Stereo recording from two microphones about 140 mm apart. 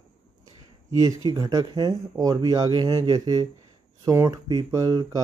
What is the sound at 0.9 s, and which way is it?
Speech, 25° right (ahead or behind).